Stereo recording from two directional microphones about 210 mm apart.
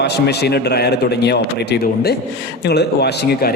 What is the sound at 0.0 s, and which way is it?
Speech, 50° left (ahead or behind).